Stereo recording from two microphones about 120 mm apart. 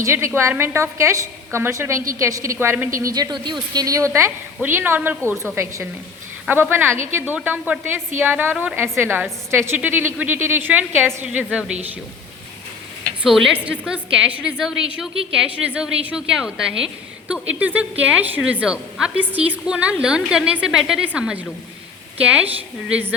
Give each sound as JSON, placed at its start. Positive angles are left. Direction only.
{"t": 0.0, "sound": "a woman's voice", "side_deg": -25}
{"t": 3.1, "sound": "a woman's voice", "side_deg": -35}
{"t": 13.2, "sound": "a woman's voice", "side_deg": 0}